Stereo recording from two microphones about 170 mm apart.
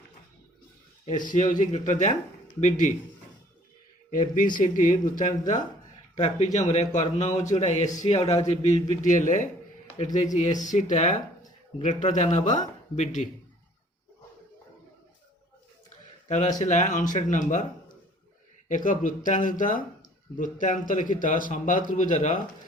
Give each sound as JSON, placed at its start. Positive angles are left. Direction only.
{"t": 1.2, "sound": "speech", "side_deg": 50}
{"t": 4.1, "sound": "speech", "side_deg": 50}
{"t": 16.3, "sound": "speech", "side_deg": 45}
{"t": 18.7, "sound": "speech", "side_deg": 50}